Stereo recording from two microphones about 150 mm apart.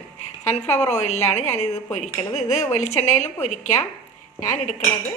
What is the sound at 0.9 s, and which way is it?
Speech, 50° left (ahead or behind).